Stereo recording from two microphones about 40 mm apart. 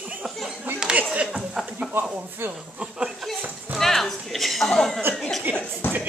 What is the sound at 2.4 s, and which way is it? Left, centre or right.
Speech, right.